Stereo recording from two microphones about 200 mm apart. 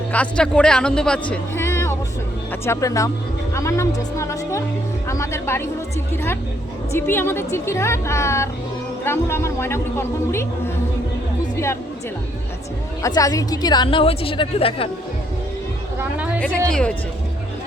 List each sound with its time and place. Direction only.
0.1 s a woman's voice: 5° left (ahead or behind)
6.9 s a woman's voice: 10° left (ahead or behind)
11.5 s music: 15° left (ahead or behind)
13.0 s a woman's voice: 15° left (ahead or behind)
16.0 s a sound: 5° right (ahead or behind)